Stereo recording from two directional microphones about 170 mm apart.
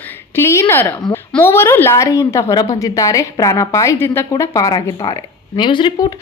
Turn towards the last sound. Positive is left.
turn(degrees=30)  # may be behind; listen again after turning